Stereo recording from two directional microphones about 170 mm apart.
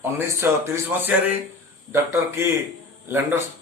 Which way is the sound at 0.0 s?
15° right (ahead or behind).